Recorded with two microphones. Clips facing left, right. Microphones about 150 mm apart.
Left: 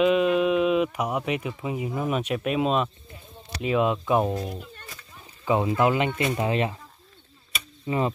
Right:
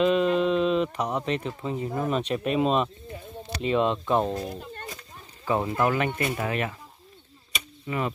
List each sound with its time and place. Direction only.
0.0 s speech: 5° left (ahead or behind); by 6.8 s 25° left (ahead or behind)
7.8 s speech: 25° left (ahead or behind)